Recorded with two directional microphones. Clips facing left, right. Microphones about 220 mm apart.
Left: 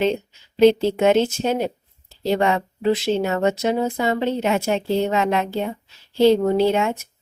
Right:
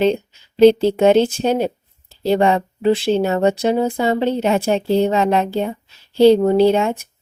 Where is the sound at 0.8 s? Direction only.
35° right (ahead or behind).